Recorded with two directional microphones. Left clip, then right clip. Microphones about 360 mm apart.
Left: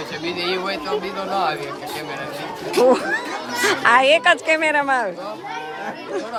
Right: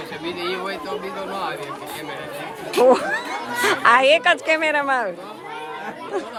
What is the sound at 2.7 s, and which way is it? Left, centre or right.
Speech, centre.